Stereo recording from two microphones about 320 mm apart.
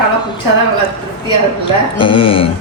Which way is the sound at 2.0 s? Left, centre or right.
Centre.